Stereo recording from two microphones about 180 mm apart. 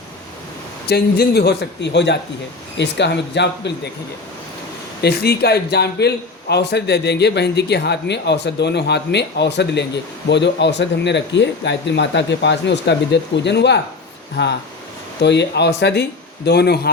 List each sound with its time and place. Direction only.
0.9 s a man's voice: 60° left (ahead or behind)
5.0 s a man's voice: 60° left (ahead or behind)